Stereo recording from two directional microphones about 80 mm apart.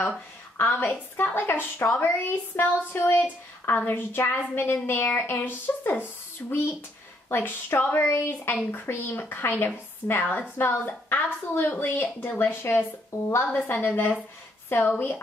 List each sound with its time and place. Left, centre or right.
0.6 s a woman's voice: left
7.2 s a woman's voice: left
13.1 s a woman's voice: left
13.5 s a woman's voice: centre